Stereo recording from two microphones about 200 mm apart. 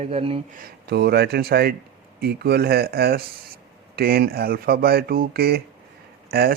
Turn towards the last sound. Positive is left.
turn(degrees=-50)  # may be behind; listen again after turning